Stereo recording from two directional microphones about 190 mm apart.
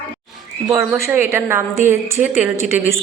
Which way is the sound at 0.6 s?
15° right (ahead or behind).